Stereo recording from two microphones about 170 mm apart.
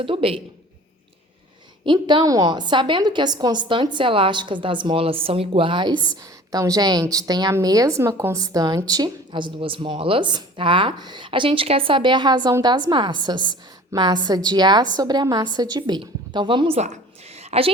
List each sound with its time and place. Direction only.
0.0 s a man's voice: 30° right (ahead or behind)
1.8 s a woman's voice: 30° right (ahead or behind)